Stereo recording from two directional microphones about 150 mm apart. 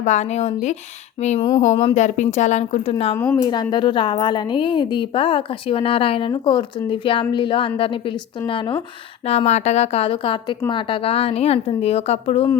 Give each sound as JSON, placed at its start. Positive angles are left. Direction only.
{"t": 0.0, "sound": "speech", "side_deg": 50}
{"t": 1.4, "sound": "speech", "side_deg": 25}
{"t": 1.6, "sound": "speech", "side_deg": 50}
{"t": 3.3, "sound": "a woman's voice", "side_deg": 30}
{"t": 9.2, "sound": "a woman's voice", "side_deg": 45}